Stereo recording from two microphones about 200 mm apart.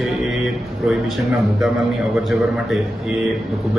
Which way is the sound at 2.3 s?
Centre (ahead or behind).